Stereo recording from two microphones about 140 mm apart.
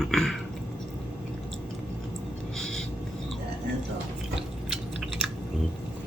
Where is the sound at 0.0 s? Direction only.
Centre (ahead or behind).